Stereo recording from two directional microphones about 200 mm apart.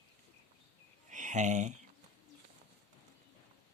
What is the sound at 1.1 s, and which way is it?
Speech, 40° right (ahead or behind).